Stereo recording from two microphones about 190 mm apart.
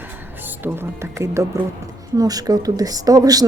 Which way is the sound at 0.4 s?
10° right (ahead or behind).